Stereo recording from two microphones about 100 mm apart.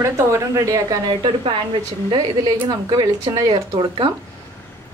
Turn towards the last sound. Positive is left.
turn(degrees=-55)  # may be behind; listen again after turning